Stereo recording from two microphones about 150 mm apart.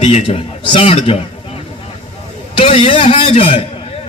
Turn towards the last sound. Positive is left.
turn(degrees=35)  # may be behind; listen again after turning